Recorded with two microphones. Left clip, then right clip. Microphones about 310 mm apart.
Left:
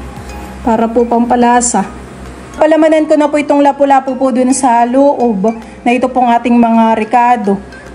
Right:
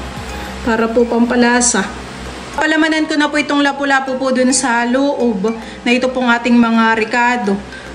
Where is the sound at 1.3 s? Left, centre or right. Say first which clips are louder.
Left 3 dB; left.